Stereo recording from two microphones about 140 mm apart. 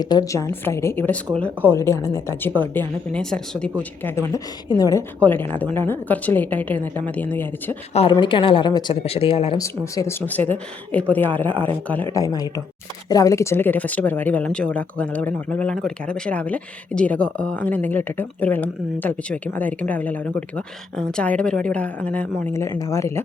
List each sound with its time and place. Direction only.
0.0 s speech: 30° left (ahead or behind)
2.7 s speech: 5° left (ahead or behind); by 5.0 s 25° left (ahead or behind)
5.2 s speech: 15° left (ahead or behind)
8.1 s speech: 35° left (ahead or behind)
9.6 s speech: 20° left (ahead or behind)
12.1 s speech: 25° left (ahead or behind)